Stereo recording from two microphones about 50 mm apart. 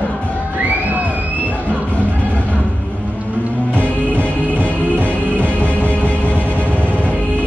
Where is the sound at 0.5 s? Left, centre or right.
Right.